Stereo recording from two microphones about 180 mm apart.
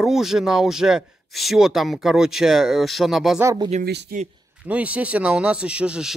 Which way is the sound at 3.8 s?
65° right (ahead or behind).